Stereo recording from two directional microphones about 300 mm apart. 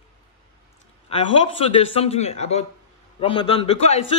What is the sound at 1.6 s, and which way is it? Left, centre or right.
A man's voice, centre.